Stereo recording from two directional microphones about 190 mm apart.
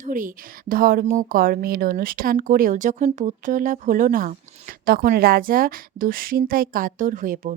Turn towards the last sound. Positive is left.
turn(degrees=-45)  # may be behind; listen again after turning